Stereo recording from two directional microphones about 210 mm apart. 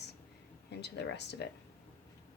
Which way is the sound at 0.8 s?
55° left (ahead or behind).